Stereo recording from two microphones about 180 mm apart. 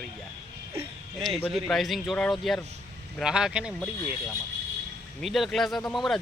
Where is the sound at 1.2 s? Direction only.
Centre (ahead or behind).